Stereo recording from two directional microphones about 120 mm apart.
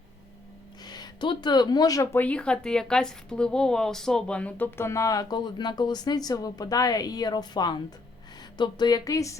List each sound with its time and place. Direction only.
0.9 s speech: 35° left (ahead or behind)
2.1 s speech: 10° left (ahead or behind); by 9.4 s 25° left (ahead or behind)